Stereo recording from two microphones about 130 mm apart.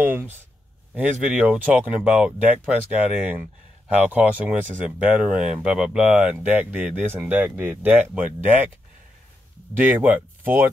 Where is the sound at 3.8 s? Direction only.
10° right (ahead or behind).